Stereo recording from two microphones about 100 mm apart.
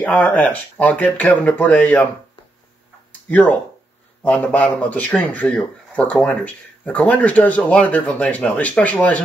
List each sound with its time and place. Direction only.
0.0 s speech: 15° left (ahead or behind)
3.1 s a sound: 15° left (ahead or behind)
4.2 s speech: 15° left (ahead or behind)